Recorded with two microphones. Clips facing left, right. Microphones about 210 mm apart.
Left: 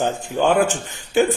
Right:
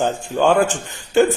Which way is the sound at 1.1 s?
15° left (ahead or behind).